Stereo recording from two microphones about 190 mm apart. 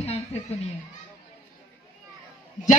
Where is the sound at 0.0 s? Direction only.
35° left (ahead or behind).